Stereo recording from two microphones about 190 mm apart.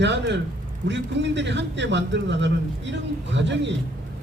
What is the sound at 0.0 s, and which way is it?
A man's voice, 70° right (ahead or behind).